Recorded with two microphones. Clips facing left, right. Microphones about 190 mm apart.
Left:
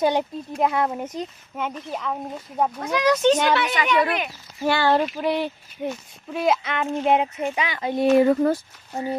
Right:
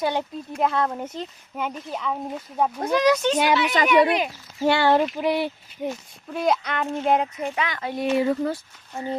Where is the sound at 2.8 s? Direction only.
30° right (ahead or behind); by 5.5 s 10° right (ahead or behind).